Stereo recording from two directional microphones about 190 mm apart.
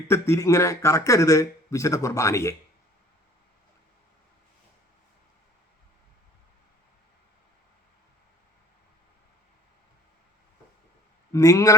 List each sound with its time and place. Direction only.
0.1 s speech: 15° left (ahead or behind)
11.3 s speech: 15° left (ahead or behind)